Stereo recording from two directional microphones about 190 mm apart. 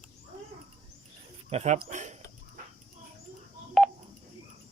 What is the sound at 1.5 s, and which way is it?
Speech, 35° right (ahead or behind).